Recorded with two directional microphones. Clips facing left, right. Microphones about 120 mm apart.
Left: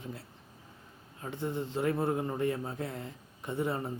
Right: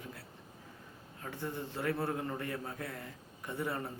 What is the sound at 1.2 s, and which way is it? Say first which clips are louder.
Speech: left 5 dB; 20° left (ahead or behind).